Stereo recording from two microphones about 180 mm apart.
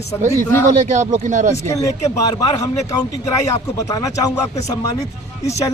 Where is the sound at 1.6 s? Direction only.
15° left (ahead or behind).